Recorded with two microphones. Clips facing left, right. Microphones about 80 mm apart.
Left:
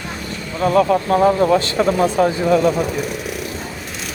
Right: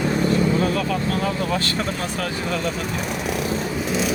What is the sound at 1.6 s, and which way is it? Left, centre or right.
Speech, left.